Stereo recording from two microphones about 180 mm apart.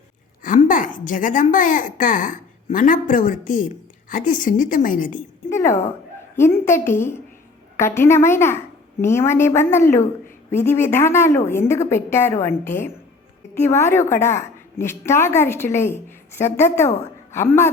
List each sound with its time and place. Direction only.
0.4 s a woman's voice: 45° left (ahead or behind)
5.5 s a sound: 15° left (ahead or behind)
6.3 s a woman's voice: 15° left (ahead or behind)